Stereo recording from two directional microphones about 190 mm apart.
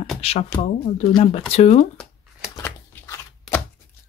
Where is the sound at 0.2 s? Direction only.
30° left (ahead or behind).